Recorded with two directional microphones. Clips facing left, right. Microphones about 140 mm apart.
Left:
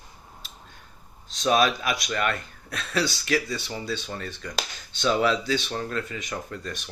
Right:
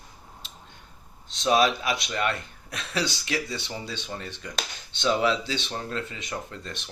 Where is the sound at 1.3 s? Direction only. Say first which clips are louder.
Even; 25° right (ahead or behind).